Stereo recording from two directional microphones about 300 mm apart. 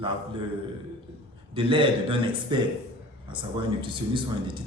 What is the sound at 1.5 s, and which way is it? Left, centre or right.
Speech, centre.